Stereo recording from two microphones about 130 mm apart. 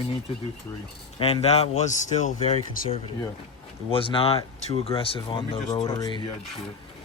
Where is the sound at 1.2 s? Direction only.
55° left (ahead or behind).